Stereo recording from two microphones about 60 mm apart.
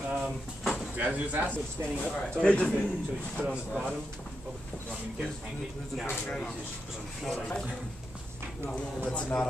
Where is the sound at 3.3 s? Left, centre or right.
Centre.